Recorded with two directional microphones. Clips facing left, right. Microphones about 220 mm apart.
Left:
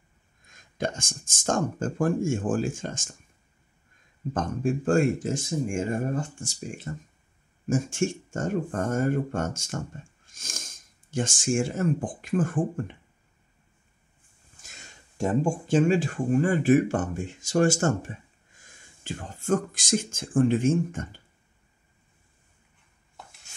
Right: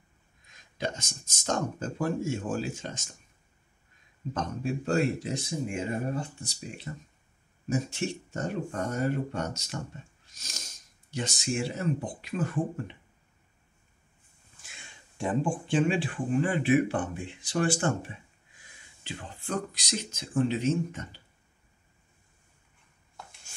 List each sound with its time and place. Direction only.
0.5 s speech: 50° left (ahead or behind)
4.3 s speech: 50° left (ahead or behind)
14.6 s speech: 40° left (ahead or behind)